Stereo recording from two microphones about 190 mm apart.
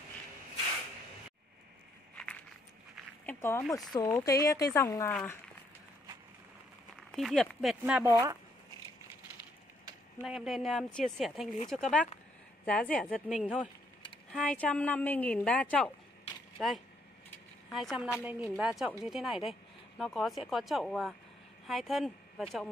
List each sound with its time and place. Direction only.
3.3 s a woman's voice: 15° left (ahead or behind)
7.1 s speech: centre (ahead or behind)
10.2 s a woman's voice: centre (ahead or behind)